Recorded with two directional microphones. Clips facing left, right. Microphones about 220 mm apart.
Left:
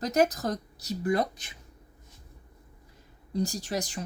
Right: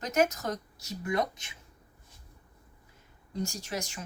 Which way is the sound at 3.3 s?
35° left (ahead or behind).